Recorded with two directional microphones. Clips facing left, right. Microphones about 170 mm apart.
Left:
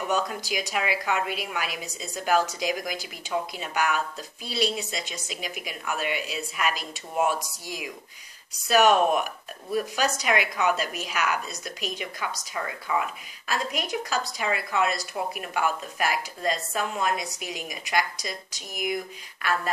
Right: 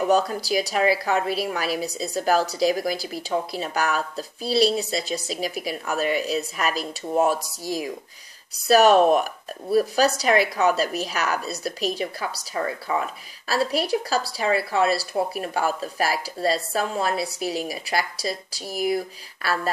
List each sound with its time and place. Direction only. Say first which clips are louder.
0.1 s speech: right 5 dB; 35° right (ahead or behind)